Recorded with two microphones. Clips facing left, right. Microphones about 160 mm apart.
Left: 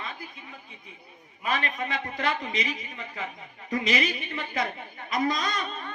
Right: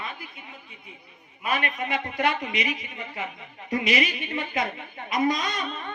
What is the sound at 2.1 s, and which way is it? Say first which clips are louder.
A woman's voice: right 4 dB; 40° left (ahead or behind).